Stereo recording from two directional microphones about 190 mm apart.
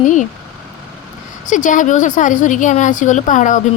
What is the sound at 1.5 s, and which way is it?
Speech, 40° left (ahead or behind).